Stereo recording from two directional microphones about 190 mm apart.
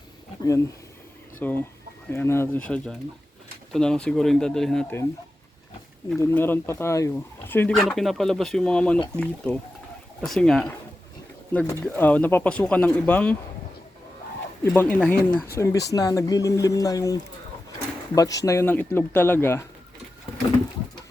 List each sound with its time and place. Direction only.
1.4 s speech: 10° left (ahead or behind)
6.1 s speech: 10° left (ahead or behind)
11.5 s speech: 10° left (ahead or behind)
14.6 s speech: 10° left (ahead or behind)